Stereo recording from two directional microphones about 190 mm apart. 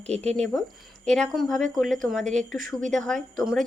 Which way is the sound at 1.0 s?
5° left (ahead or behind).